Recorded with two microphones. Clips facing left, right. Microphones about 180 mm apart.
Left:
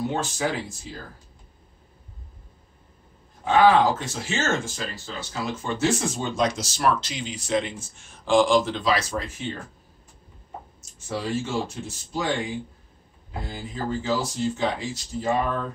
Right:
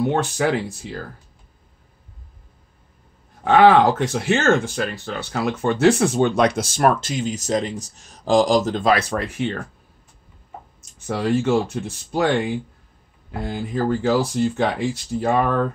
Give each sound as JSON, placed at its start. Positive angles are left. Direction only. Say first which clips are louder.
{"t": 0.0, "sound": "speech", "louder": "right 6 dB", "side_deg": -60}
{"t": 3.4, "sound": "speech", "louder": "right 4 dB", "side_deg": -65}
{"t": 11.1, "sound": "speech", "louder": "right 8 dB", "side_deg": -65}